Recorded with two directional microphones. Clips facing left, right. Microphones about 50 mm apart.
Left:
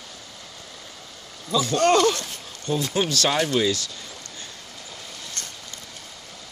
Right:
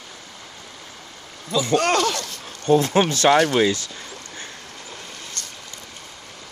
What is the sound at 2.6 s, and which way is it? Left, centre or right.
Speech, right.